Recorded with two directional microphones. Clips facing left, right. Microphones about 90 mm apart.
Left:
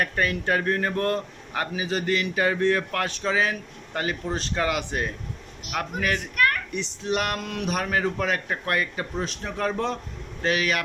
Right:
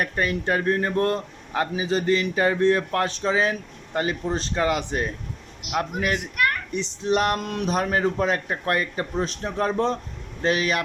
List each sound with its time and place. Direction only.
0.0 s a man's voice: 25° right (ahead or behind)
5.6 s a child's voice: 20° right (ahead or behind)
7.1 s a man's voice: 30° right (ahead or behind)